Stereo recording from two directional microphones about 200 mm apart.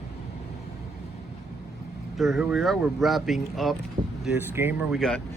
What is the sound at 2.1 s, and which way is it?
Speech, centre (ahead or behind).